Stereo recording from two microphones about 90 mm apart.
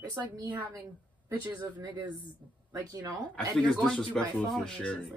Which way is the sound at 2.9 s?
40° right (ahead or behind).